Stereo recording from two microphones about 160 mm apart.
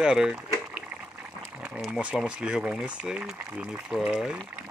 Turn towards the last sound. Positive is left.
turn(degrees=-5)  # may be behind; listen again after turning